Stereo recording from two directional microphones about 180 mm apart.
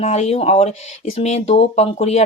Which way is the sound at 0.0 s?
35° left (ahead or behind).